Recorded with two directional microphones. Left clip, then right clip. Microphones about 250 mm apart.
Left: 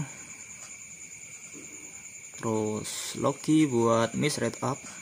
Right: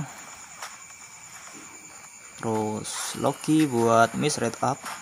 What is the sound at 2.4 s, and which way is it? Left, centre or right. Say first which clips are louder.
Speech: right 2 dB; centre.